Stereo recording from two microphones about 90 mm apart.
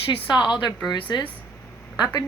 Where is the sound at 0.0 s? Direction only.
70° left (ahead or behind).